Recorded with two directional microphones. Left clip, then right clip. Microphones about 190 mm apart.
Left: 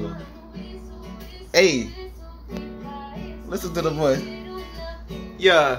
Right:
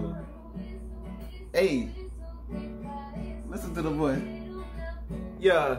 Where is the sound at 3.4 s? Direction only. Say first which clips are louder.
Left 10 dB; 35° left (ahead or behind).